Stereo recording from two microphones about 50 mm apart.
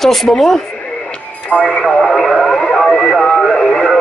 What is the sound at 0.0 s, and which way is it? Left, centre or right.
Speech, centre.